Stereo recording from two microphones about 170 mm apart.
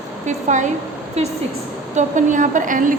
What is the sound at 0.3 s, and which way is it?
Speech, 45° right (ahead or behind).